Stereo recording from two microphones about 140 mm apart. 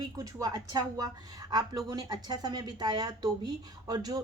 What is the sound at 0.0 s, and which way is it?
A woman's voice, 25° right (ahead or behind).